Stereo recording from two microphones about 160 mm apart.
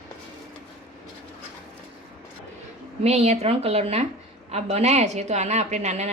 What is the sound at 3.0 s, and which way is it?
A woman's voice, 40° right (ahead or behind).